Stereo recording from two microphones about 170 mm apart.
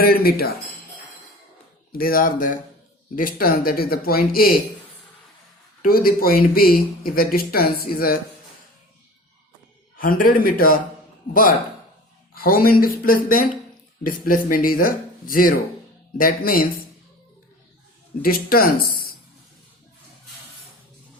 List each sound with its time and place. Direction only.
0.0 s speech: 60° left (ahead or behind)
1.9 s speech: 60° left (ahead or behind)
5.8 s speech: 60° left (ahead or behind)
10.0 s speech: 55° left (ahead or behind)
12.3 s speech: 60° left (ahead or behind)
18.2 s speech: 60° left (ahead or behind)